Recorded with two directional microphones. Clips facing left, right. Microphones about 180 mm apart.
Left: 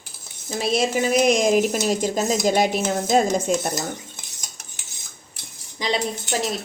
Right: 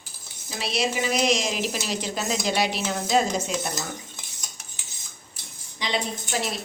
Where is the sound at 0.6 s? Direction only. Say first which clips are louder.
Left 5 dB; 50° left (ahead or behind).